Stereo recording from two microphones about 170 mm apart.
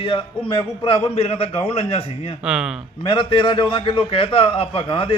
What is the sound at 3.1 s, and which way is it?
A man's voice, 30° left (ahead or behind).